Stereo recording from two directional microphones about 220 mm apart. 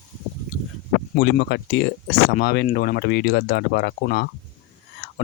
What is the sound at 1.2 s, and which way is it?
Speech, 50° left (ahead or behind).